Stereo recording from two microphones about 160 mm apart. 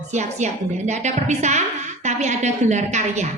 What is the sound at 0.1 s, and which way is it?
A woman's voice, 45° right (ahead or behind).